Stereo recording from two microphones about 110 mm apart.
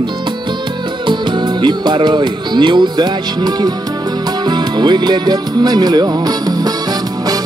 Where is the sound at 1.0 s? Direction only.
45° right (ahead or behind).